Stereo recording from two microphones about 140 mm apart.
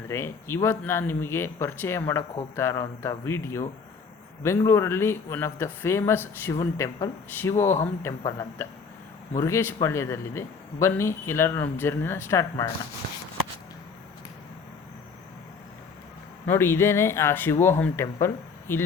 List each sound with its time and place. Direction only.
0.1 s a man's voice: 15° left (ahead or behind)
16.5 s speech: 15° left (ahead or behind)